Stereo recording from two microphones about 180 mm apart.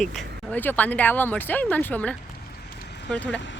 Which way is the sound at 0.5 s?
10° left (ahead or behind).